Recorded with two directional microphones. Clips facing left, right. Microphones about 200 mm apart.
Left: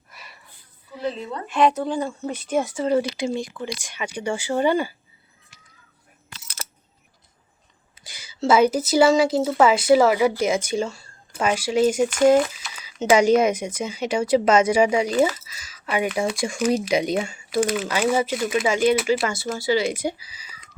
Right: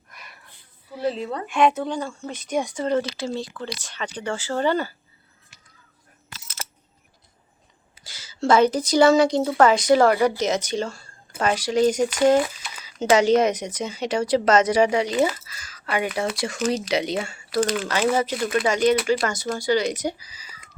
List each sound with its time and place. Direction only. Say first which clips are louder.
0.1 s a sound: even; 5° left (ahead or behind)
1.5 s speech: left 1 dB; centre (ahead or behind)
2.0 s speech: left 4 dB; 15° left (ahead or behind)
2.5 s speech: left 2 dB; 5° left (ahead or behind)
8.0 s a sound: left 1 dB; 15° left (ahead or behind)
8.4 s speech: even; 10° left (ahead or behind)